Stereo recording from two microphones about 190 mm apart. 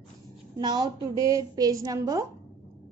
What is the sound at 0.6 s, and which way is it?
A woman's voice, 20° right (ahead or behind).